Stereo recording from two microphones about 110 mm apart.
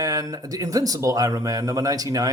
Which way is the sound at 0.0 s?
30° right (ahead or behind).